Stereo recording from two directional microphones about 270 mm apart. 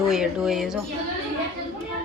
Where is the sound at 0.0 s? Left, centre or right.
Centre.